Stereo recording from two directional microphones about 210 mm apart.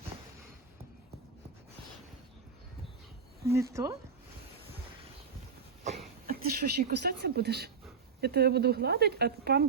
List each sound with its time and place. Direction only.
3.5 s speech: 15° right (ahead or behind)
6.2 s speech: 45° right (ahead or behind)